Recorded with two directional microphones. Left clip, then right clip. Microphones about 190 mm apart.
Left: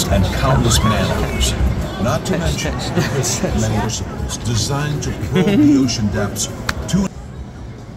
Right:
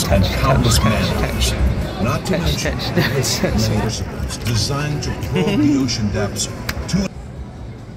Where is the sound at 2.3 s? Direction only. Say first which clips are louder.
Even; 5° left (ahead or behind).